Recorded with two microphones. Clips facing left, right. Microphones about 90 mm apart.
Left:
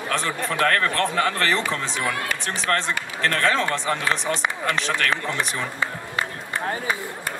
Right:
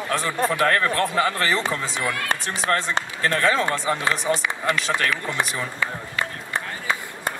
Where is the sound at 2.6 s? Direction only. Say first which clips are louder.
Right 1 dB; 40° right (ahead or behind).